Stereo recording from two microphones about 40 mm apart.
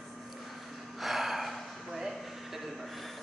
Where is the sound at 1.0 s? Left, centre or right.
Centre.